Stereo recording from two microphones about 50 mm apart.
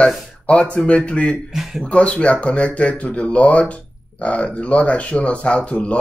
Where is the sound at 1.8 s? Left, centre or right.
Left.